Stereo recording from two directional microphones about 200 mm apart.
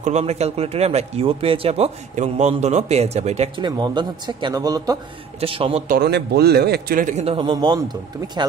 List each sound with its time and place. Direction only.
0.0 s speech: 35° right (ahead or behind); by 4.9 s 20° right (ahead or behind)
5.4 s speech: 30° right (ahead or behind)
5.9 s speech: 55° right (ahead or behind); by 8.5 s 20° right (ahead or behind)